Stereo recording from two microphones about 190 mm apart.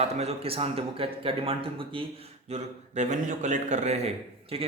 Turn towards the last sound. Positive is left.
turn(degrees=-30)  # may be behind; listen again after turning